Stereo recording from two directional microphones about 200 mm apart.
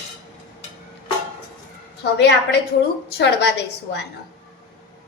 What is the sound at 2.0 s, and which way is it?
A woman's voice, 55° left (ahead or behind).